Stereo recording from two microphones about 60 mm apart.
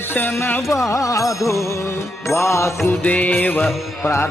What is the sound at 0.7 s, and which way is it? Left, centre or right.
Music, left.